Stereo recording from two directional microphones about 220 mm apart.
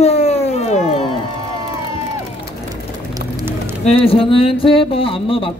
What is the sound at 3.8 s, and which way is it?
A man's voice, 25° left (ahead or behind).